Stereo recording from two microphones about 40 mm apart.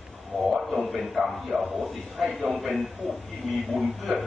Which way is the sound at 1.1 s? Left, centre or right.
Centre.